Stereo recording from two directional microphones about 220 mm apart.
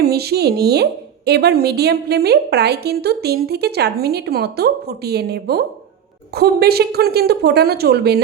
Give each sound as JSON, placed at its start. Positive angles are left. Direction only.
{"t": 0.0, "sound": "speech", "side_deg": -45}